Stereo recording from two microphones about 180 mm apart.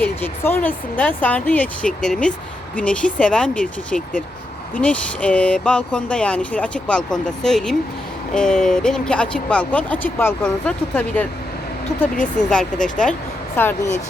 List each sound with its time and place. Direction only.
0.0 s speech: 10° left (ahead or behind)
4.8 s speech: 5° left (ahead or behind)
12.1 s speech: 45° left (ahead or behind)
12.5 s speech: 5° left (ahead or behind)